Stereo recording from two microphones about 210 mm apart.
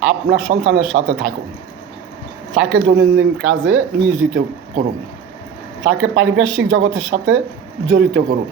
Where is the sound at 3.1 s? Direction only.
65° right (ahead or behind).